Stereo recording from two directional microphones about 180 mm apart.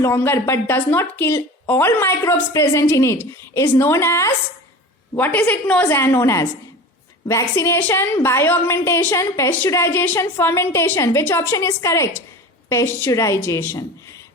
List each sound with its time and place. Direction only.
0.0 s a woman's voice: 15° left (ahead or behind)